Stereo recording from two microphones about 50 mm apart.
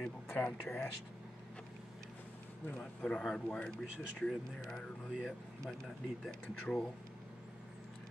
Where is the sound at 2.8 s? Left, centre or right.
Centre.